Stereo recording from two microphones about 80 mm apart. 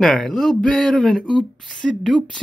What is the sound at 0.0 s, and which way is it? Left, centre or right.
Speech, centre.